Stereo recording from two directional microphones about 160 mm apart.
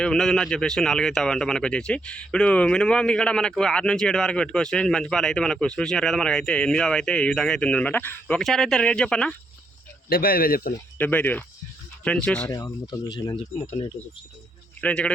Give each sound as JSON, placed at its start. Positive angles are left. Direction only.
{"t": 0.0, "sound": "speech", "side_deg": 5}
{"t": 10.1, "sound": "speech", "side_deg": 65}
{"t": 10.9, "sound": "speech", "side_deg": 10}
{"t": 12.5, "sound": "speech", "side_deg": 20}
{"t": 14.8, "sound": "speech", "side_deg": 10}